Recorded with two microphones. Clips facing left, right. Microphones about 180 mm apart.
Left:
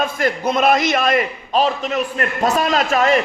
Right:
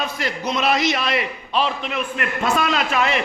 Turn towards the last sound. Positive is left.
turn(degrees=40)  # may be behind; listen again after turning